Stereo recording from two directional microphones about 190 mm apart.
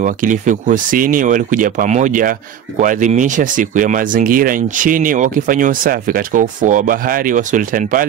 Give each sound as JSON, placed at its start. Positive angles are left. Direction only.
{"t": 0.0, "sound": "speech", "side_deg": -40}